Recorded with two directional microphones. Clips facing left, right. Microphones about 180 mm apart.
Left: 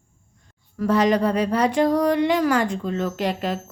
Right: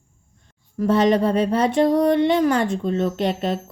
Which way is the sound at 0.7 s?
25° right (ahead or behind).